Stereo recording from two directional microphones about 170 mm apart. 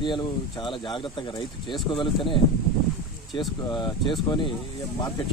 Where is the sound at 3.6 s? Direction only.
25° left (ahead or behind).